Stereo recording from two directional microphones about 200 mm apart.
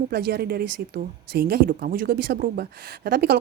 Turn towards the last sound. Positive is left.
turn(degrees=-50)  # may be behind; listen again after turning